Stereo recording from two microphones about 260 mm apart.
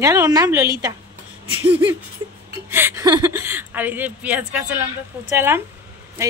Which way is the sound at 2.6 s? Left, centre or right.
Centre.